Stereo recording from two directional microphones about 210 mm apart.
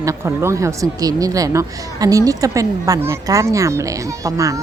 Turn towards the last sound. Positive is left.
turn(degrees=-15)  # may be behind; listen again after turning